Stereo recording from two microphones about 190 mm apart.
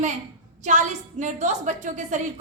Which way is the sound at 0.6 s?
40° right (ahead or behind).